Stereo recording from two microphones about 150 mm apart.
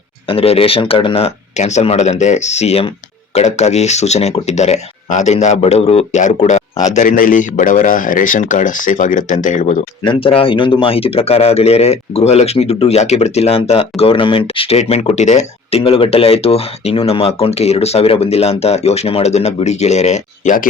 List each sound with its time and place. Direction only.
0.3 s speech: 40° left (ahead or behind); by 9.7 s 55° left (ahead or behind)
10.0 s speech: 35° left (ahead or behind); by 20.7 s 60° left (ahead or behind)